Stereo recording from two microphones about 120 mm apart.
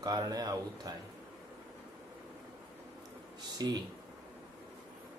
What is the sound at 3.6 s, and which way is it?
Speech, 35° right (ahead or behind).